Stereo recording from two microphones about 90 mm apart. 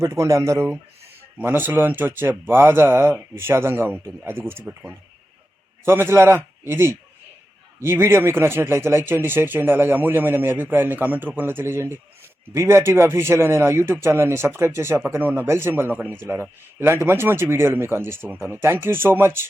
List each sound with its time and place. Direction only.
0.0 s speech: 35° right (ahead or behind)
1.4 s speech: 20° right (ahead or behind)
5.8 s speech: 25° right (ahead or behind)